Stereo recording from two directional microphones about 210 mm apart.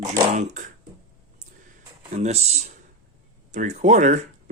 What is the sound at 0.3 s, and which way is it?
Speech, 35° right (ahead or behind).